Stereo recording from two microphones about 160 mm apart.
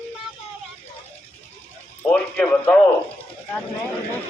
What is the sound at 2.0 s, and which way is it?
Speech, 10° left (ahead or behind).